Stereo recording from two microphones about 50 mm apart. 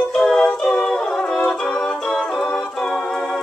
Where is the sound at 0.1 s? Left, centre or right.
Centre.